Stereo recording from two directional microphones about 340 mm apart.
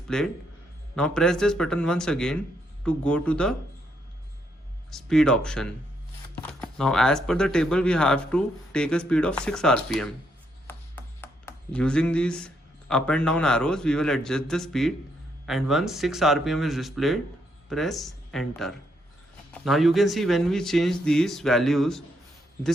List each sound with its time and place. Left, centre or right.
0.1 s speech: centre
4.9 s speech: centre
10.7 s a sound: centre
12.9 s speech: centre